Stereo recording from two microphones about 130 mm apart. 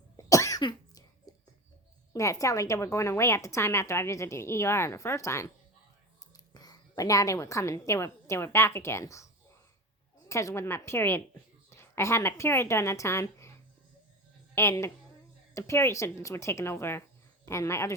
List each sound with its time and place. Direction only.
0.2 s cough: 25° left (ahead or behind)
0.6 s cough: 35° left (ahead or behind)
2.1 s a woman's voice: 25° left (ahead or behind)